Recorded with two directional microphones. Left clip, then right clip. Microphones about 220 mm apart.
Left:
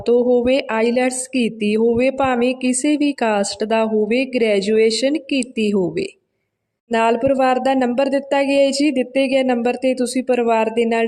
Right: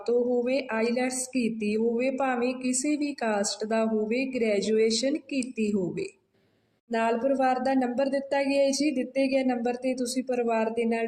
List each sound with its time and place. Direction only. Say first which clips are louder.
0.0 s speech: left 10 dB; 45° left (ahead or behind)